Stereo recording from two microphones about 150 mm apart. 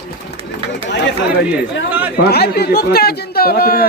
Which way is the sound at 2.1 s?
90° left.